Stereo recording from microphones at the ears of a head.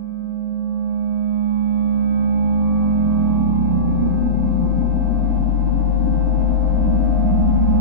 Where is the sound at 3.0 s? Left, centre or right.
Right.